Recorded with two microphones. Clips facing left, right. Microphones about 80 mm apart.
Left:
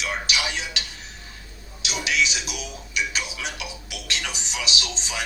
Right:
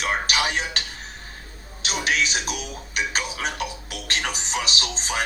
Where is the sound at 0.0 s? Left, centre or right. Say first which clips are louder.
Right 4 dB; right.